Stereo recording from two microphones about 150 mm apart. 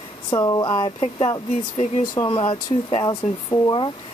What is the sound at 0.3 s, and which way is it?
Speech, 25° left (ahead or behind).